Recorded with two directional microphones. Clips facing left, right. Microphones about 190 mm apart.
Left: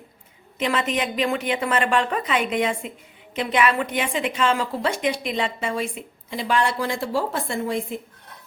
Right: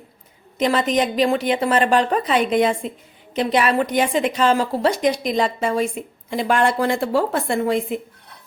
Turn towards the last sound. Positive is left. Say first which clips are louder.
# right 6 dB
turn(degrees=-65)  # may be behind; listen again after turning